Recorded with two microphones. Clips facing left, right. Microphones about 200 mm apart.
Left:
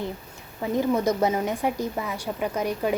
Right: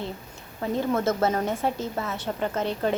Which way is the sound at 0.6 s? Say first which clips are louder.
Left 2 dB; 15° left (ahead or behind).